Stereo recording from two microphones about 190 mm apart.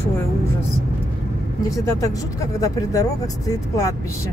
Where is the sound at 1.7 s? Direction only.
20° left (ahead or behind).